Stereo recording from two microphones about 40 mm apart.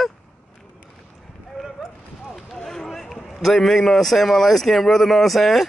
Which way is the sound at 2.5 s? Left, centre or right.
Centre.